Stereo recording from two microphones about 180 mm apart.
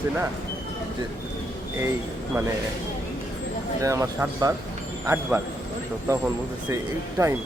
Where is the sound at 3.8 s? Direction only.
15° right (ahead or behind).